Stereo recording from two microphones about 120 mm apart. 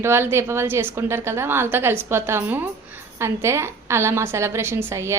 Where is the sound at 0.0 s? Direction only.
20° right (ahead or behind).